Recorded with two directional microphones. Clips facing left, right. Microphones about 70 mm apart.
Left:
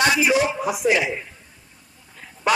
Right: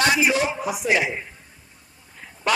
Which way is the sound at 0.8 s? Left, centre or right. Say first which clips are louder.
Left 1 dB; centre.